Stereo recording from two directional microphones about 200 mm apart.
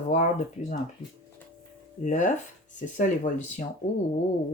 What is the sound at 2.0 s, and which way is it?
Speech, 40° left (ahead or behind).